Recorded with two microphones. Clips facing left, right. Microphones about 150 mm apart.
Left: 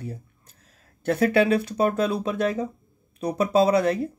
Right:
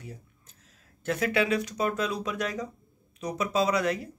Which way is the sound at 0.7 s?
35° left (ahead or behind).